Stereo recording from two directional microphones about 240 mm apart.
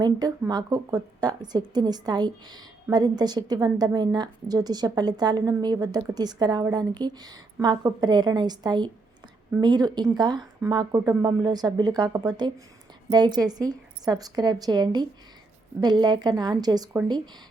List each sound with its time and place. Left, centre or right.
0.0 s a woman's voice: centre